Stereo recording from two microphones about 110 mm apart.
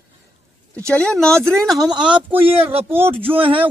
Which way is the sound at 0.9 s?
10° left (ahead or behind).